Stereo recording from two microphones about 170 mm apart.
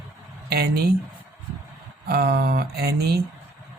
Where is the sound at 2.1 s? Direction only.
65° right (ahead or behind).